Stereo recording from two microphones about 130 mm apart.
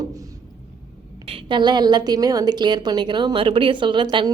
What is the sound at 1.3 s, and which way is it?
A woman's voice, 40° right (ahead or behind).